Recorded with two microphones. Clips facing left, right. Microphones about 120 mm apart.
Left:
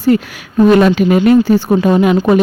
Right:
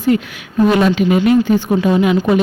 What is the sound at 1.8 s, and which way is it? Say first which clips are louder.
Speech: left 3 dB; 45° left (ahead or behind).